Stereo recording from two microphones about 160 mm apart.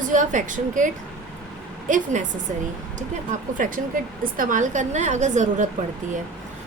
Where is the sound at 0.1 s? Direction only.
55° right (ahead or behind).